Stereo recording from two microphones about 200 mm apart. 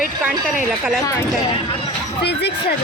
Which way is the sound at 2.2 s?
55° left (ahead or behind).